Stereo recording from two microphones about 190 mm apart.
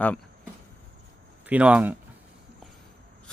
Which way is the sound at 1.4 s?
5° right (ahead or behind).